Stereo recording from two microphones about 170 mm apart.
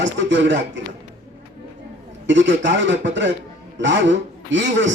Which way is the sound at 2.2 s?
90° right.